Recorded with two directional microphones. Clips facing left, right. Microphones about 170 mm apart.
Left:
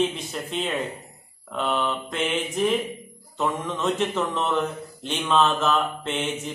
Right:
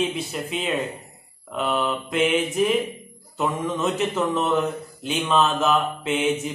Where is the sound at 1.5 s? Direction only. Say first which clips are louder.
Right 1 dB; 5° right (ahead or behind).